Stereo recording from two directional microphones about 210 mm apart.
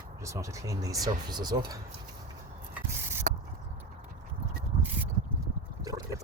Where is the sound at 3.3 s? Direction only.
40° right (ahead or behind).